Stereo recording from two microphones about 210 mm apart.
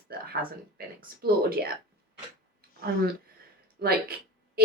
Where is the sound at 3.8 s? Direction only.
45° right (ahead or behind).